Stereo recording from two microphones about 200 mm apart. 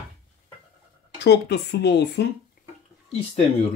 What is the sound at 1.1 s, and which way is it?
Speech, 60° left (ahead or behind).